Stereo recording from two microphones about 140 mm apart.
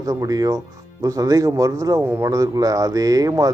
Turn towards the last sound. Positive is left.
turn(degrees=-25)  # may be behind; listen again after turning